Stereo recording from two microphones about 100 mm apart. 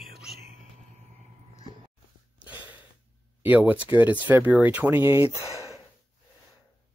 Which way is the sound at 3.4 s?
15° right (ahead or behind).